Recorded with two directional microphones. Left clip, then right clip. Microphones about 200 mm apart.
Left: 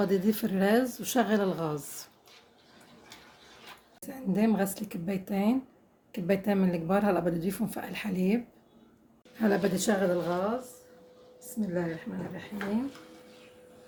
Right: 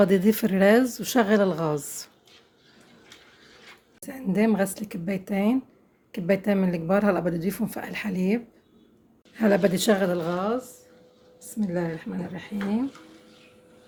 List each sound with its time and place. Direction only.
0.0 s a woman's voice: 40° right (ahead or behind)
4.0 s speech: 30° right (ahead or behind)
9.4 s a woman's voice: 35° right (ahead or behind)
11.6 s speech: 55° right (ahead or behind)